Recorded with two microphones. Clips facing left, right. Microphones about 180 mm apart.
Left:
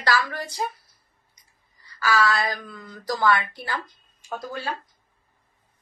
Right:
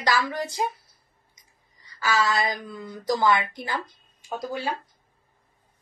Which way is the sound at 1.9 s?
20° right (ahead or behind).